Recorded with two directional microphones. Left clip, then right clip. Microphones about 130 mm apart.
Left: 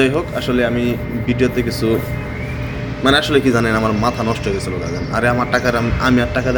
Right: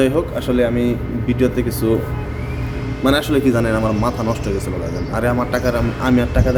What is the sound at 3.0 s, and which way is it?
A man's voice, 20° right (ahead or behind).